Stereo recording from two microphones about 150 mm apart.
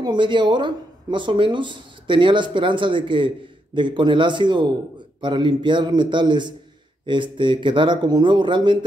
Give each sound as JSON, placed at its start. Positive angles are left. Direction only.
{"t": 0.0, "sound": "speech", "side_deg": -30}